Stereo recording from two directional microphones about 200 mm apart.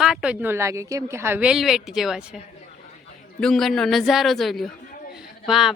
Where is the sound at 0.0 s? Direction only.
5° right (ahead or behind).